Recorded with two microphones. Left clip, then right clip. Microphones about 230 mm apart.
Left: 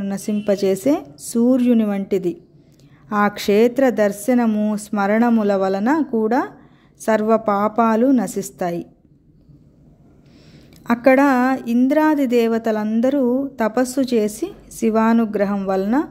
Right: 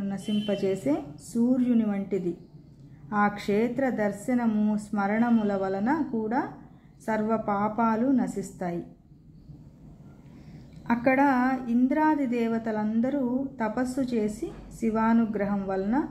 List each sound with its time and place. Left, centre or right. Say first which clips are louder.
0.0 s a woman's voice: left 8 dB; left
10.9 s a woman's voice: left 9 dB; left